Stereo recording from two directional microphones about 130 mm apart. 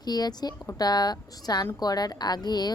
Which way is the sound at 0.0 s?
30° left (ahead or behind).